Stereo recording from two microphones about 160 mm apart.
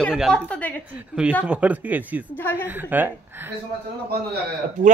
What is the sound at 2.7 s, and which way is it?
Speech, 10° right (ahead or behind).